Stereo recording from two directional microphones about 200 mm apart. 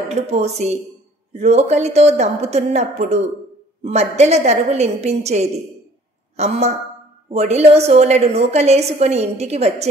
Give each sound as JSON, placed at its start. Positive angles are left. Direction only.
{"t": 0.1, "sound": "a woman's voice", "side_deg": -35}